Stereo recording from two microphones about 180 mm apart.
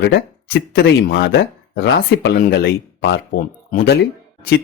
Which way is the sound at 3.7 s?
65° left (ahead or behind).